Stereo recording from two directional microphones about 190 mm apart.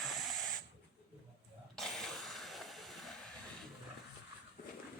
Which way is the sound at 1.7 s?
Centre (ahead or behind).